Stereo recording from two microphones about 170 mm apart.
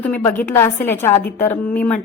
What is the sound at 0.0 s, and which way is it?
A woman's voice, 10° left (ahead or behind).